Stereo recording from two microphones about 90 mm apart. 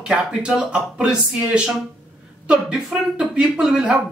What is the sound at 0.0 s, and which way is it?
Speech, 10° right (ahead or behind).